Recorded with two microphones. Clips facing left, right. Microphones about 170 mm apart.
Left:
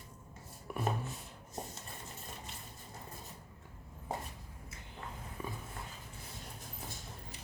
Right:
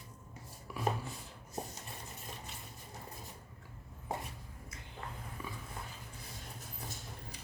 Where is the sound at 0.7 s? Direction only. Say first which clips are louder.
Left 3 dB; 55° left (ahead or behind).